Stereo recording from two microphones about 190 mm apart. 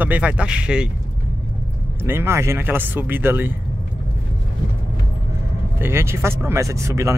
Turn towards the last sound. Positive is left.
turn(degrees=-15)  # may be behind; listen again after turning